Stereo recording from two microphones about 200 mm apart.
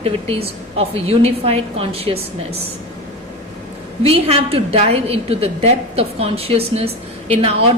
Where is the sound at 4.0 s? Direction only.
30° right (ahead or behind).